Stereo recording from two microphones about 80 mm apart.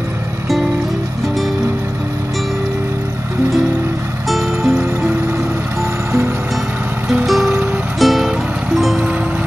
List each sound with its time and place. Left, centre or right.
4.3 s music: centre
7.2 s music: centre